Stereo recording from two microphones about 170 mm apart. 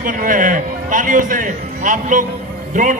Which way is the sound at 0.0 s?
50° right (ahead or behind).